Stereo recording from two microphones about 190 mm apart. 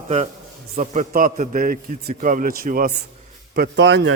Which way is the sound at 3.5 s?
60° right (ahead or behind).